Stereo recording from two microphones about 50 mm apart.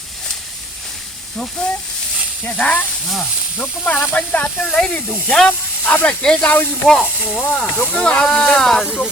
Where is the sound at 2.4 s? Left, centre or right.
Left.